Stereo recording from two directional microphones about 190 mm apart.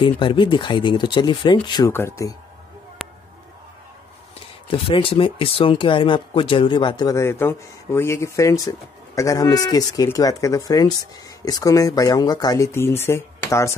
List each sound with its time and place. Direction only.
0.0 s speech: 25° left (ahead or behind)
1.9 s speech: 10° left (ahead or behind)
3.0 s a sound: centre (ahead or behind)
4.6 s speech: 30° left (ahead or behind)